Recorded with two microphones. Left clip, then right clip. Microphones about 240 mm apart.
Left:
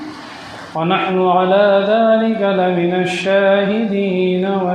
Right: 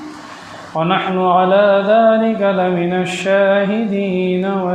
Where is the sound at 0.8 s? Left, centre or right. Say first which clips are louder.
Even; right.